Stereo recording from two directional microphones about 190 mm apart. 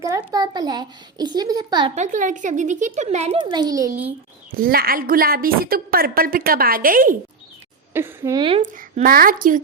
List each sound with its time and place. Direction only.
0.0 s a child's voice: 15° right (ahead or behind)
2.0 s a child's voice: 40° right (ahead or behind); by 4.1 s 15° right (ahead or behind)
4.5 s a woman's voice: 50° right (ahead or behind)
7.9 s a child's voice: 15° right (ahead or behind)
8.6 s a woman's voice: 45° right (ahead or behind)